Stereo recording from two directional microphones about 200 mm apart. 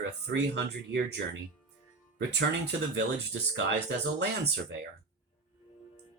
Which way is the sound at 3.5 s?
60° right (ahead or behind).